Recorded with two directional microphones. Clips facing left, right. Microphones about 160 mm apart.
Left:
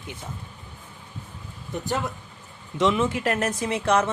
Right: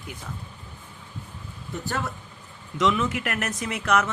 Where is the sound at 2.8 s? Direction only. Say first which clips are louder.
Left 2 dB; 30° left (ahead or behind).